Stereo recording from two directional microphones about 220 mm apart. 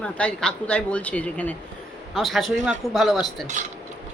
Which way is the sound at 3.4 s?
35° right (ahead or behind).